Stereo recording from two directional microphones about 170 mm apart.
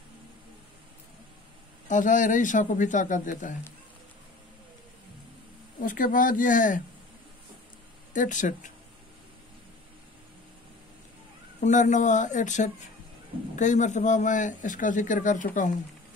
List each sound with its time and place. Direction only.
1.9 s speech: 50° left (ahead or behind)
5.8 s speech: 55° left (ahead or behind)
8.1 s speech: 50° left (ahead or behind)
11.6 s speech: 45° left (ahead or behind)